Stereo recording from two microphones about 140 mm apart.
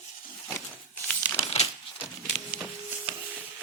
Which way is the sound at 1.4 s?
45° left (ahead or behind).